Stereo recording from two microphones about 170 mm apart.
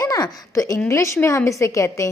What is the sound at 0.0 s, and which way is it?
A woman's voice, 20° left (ahead or behind).